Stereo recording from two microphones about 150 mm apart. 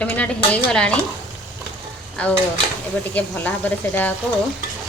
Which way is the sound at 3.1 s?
10° left (ahead or behind).